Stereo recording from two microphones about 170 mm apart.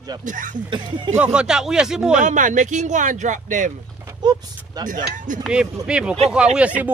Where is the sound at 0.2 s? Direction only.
50° right (ahead or behind).